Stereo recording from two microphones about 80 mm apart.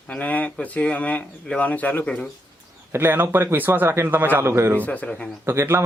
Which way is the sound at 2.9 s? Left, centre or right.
Right.